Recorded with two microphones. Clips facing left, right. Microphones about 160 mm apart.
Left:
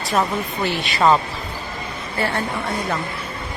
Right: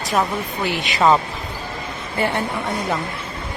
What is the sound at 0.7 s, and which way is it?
A woman's voice, 20° right (ahead or behind).